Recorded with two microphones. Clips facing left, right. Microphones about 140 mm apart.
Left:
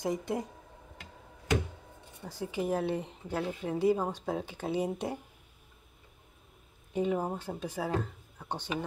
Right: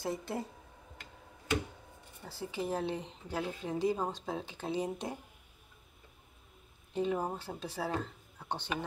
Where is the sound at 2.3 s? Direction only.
15° left (ahead or behind).